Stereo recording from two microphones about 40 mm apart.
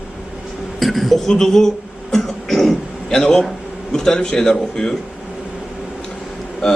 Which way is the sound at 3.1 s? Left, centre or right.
Centre.